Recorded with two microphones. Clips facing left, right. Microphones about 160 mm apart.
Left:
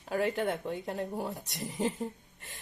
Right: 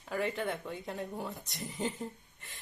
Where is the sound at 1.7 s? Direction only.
40° left (ahead or behind).